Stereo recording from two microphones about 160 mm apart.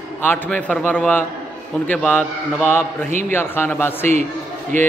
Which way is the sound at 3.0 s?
50° right (ahead or behind).